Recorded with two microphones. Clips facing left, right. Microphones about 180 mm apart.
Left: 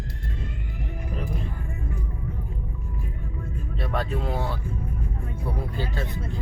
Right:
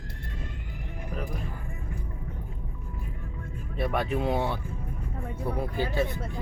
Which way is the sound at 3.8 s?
15° right (ahead or behind).